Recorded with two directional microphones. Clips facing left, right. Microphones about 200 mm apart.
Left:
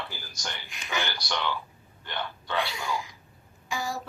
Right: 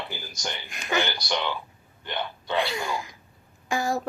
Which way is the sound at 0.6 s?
55° right (ahead or behind).